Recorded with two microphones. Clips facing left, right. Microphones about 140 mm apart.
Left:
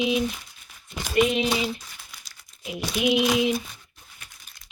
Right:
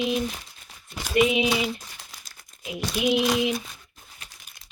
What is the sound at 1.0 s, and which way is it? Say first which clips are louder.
Speech: right 1 dB; 5° right (ahead or behind).